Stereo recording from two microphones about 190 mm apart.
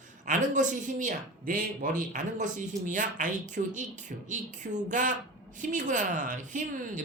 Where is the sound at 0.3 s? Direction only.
40° right (ahead or behind).